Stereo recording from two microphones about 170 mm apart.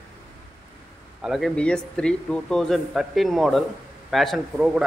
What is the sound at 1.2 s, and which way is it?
Speech, centre (ahead or behind).